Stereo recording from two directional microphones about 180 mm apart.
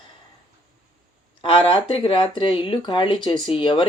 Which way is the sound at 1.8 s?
30° left (ahead or behind).